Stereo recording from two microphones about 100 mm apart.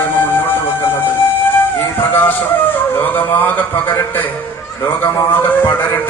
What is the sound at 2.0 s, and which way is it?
A man's voice, 20° left (ahead or behind).